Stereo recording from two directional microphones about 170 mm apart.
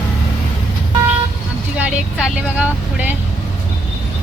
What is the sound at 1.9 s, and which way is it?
Speech, 5° right (ahead or behind).